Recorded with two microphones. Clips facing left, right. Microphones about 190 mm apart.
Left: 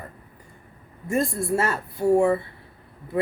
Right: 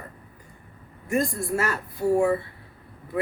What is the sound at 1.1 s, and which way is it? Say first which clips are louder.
Speech: left 1 dB; 25° left (ahead or behind).